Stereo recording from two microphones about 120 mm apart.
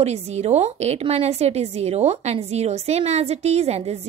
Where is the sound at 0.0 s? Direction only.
65° right (ahead or behind).